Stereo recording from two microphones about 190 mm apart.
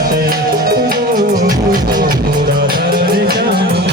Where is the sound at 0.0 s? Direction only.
50° right (ahead or behind).